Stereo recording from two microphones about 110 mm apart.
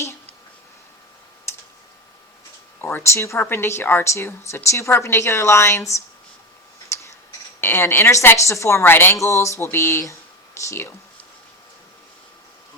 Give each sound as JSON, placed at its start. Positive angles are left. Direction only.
{"t": 1.5, "sound": "tick", "side_deg": 25}
{"t": 2.8, "sound": "speech", "side_deg": 25}
{"t": 6.8, "sound": "scissors", "side_deg": 25}
{"t": 7.6, "sound": "speech", "side_deg": 20}